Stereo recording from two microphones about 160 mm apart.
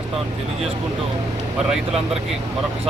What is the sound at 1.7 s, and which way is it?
Speech, centre (ahead or behind).